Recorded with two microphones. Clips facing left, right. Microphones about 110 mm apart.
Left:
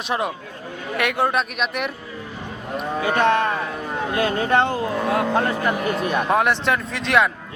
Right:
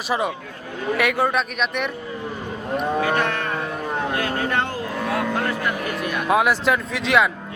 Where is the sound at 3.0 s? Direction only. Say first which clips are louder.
Left 4 dB; 25° left (ahead or behind).